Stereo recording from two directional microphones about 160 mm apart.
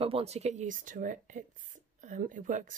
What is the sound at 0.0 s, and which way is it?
Speech, 40° right (ahead or behind).